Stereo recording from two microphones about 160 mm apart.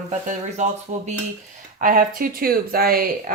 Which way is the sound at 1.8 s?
60° right (ahead or behind).